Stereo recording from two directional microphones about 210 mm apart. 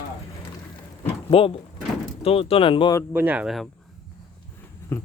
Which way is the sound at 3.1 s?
10° right (ahead or behind).